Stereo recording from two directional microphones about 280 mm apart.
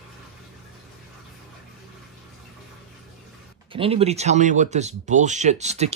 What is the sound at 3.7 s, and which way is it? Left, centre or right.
Speech, centre.